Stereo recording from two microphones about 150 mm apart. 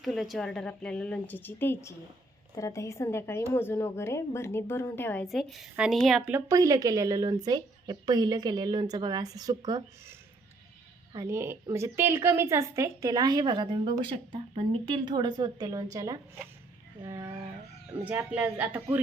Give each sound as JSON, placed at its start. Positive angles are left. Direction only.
{"t": 0.0, "sound": "a woman's voice", "side_deg": 0}
{"t": 5.2, "sound": "a woman's voice", "side_deg": 0}
{"t": 6.5, "sound": "a woman's voice", "side_deg": -25}